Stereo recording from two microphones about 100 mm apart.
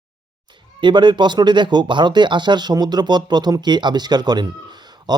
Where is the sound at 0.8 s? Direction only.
50° right (ahead or behind).